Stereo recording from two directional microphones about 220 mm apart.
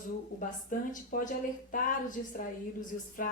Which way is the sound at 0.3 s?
40° left (ahead or behind).